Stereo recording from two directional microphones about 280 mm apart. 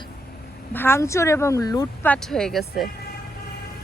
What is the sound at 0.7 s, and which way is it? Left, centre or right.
Speech, centre.